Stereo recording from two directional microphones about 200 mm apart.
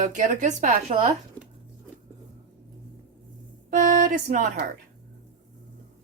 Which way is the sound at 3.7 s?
40° right (ahead or behind).